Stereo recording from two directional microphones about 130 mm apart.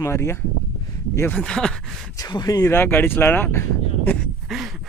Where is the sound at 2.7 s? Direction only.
15° left (ahead or behind).